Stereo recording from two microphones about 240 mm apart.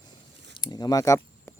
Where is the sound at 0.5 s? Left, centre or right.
Centre.